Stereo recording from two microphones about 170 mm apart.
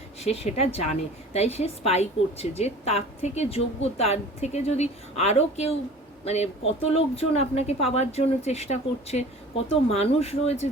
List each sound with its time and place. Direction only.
0.2 s speech: 40° left (ahead or behind)